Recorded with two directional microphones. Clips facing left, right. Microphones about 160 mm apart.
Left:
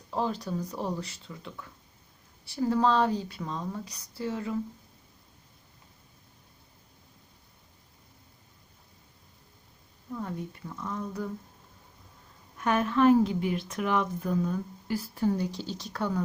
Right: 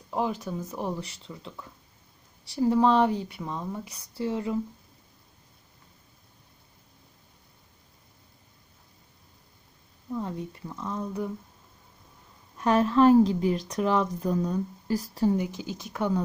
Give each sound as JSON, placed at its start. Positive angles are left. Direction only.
{"t": 0.1, "sound": "speech", "side_deg": -15}
{"t": 0.4, "sound": "speech", "side_deg": -5}
{"t": 0.8, "sound": "speech", "side_deg": -15}
{"t": 2.8, "sound": "speech", "side_deg": -20}
{"t": 3.8, "sound": "speech", "side_deg": -25}
{"t": 10.2, "sound": "speech", "side_deg": -20}
{"t": 12.5, "sound": "speech", "side_deg": -30}
{"t": 15.3, "sound": "speech", "side_deg": -15}